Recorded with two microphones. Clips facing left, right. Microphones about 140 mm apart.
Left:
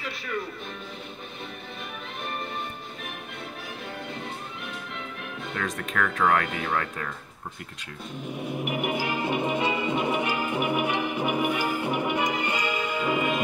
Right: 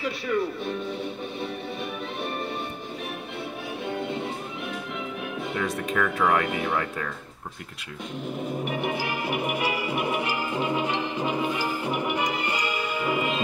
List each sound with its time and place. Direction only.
5.5 s speech: 10° right (ahead or behind)
8.5 s music: 15° left (ahead or behind)